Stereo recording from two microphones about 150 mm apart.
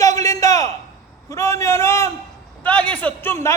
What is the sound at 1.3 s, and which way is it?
A man's voice, 20° left (ahead or behind).